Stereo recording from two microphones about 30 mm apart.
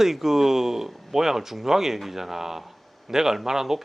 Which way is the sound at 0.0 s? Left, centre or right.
Centre.